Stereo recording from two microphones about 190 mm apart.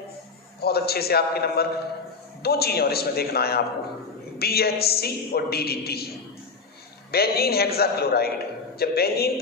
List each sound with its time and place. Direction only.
0.6 s a woman's voice: 55° left (ahead or behind)